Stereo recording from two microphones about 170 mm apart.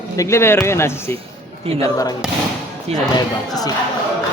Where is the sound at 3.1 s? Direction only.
20° left (ahead or behind).